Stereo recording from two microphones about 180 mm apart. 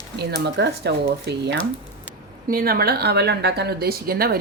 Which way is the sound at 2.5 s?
55° right (ahead or behind).